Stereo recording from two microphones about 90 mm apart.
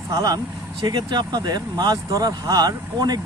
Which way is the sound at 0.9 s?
55° right (ahead or behind).